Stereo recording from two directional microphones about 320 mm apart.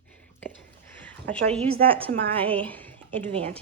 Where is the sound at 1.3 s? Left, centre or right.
Centre.